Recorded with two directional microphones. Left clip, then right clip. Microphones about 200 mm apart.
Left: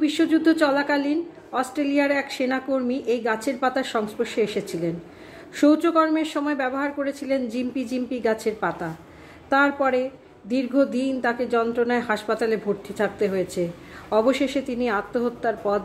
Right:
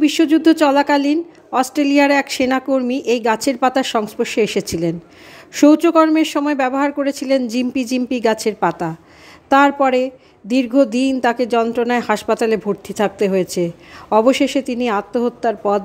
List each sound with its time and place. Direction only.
0.0 s a woman's voice: 40° right (ahead or behind)